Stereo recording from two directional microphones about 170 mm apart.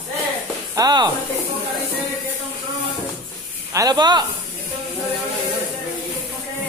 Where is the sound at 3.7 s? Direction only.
20° right (ahead or behind).